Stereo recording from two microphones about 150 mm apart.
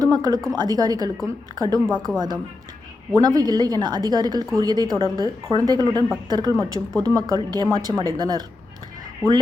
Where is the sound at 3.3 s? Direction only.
25° right (ahead or behind).